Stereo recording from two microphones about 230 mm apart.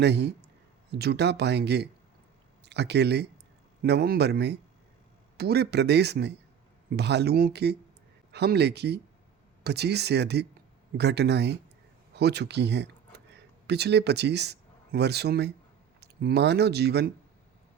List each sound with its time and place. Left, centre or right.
0.0 s speech: right